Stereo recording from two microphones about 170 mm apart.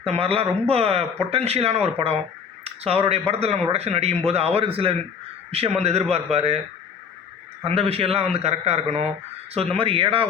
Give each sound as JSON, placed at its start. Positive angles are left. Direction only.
{"t": 0.0, "sound": "speech", "side_deg": -35}
{"t": 7.6, "sound": "speech", "side_deg": -35}